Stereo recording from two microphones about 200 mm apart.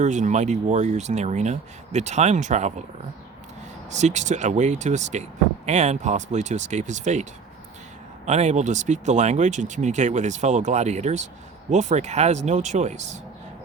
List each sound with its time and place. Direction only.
0.0 s speech: 35° right (ahead or behind)
3.8 s speech: 35° right (ahead or behind)
8.3 s speech: 35° right (ahead or behind)